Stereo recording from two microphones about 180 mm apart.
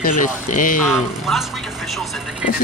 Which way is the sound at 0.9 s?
Centre (ahead or behind).